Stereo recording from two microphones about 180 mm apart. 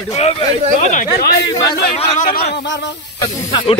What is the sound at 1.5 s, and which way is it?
Speech, 20° left (ahead or behind).